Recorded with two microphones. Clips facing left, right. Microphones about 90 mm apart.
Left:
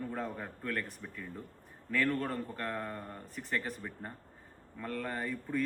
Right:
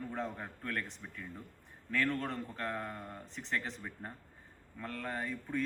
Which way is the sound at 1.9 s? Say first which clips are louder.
Left 2 dB; 5° left (ahead or behind).